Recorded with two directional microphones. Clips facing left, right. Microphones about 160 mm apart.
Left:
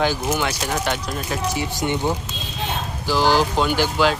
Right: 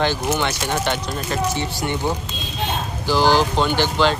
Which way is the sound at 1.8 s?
15° left (ahead or behind).